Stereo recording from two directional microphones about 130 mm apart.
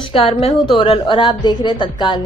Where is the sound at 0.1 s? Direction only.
50° left (ahead or behind).